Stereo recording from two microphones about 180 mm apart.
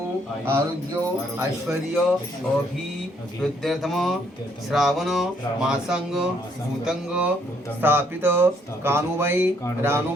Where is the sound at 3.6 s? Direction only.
Centre (ahead or behind).